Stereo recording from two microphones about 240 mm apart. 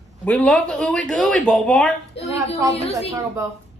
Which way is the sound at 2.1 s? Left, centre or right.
Left.